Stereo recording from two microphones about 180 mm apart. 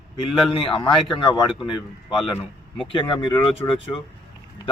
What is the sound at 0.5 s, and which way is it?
Speech, 30° left (ahead or behind).